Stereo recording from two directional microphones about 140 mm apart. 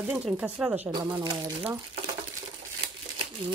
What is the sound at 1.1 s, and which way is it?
Speech, 35° right (ahead or behind).